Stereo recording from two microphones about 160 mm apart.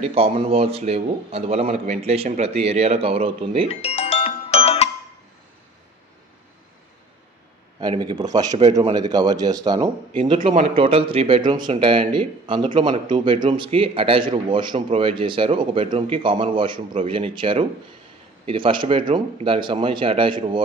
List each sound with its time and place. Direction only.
0.0 s speech: 40° right (ahead or behind)
3.6 s music: 40° left (ahead or behind)
7.8 s a man's voice: 30° right (ahead or behind)